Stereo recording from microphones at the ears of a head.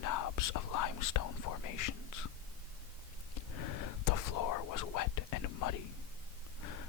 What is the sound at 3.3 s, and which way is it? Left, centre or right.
Whispering, left.